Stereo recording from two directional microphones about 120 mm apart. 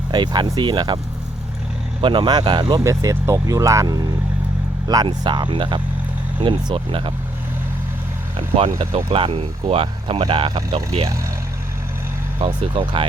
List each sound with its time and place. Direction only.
0.1 s speech: 40° right (ahead or behind)
2.0 s speech: 40° right (ahead or behind)
8.4 s speech: 55° right (ahead or behind)
12.4 s speech: 45° right (ahead or behind)